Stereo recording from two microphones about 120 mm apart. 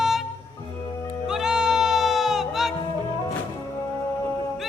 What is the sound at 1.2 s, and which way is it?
Music, 5° right (ahead or behind).